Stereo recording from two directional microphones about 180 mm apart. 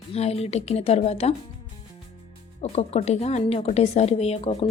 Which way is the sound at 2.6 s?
35° left (ahead or behind).